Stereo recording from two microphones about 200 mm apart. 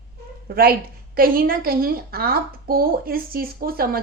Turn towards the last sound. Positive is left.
turn(degrees=-50)  # may be behind; listen again after turning